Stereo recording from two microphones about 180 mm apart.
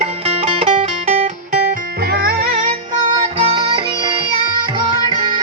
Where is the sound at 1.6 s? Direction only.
55° right (ahead or behind).